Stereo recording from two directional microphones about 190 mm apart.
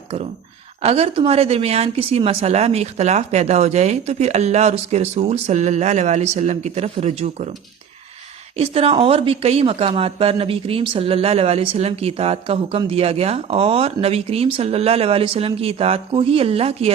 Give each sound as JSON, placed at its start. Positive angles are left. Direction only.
{"t": 0.8, "sound": "speech", "side_deg": -30}
{"t": 8.5, "sound": "speech", "side_deg": -30}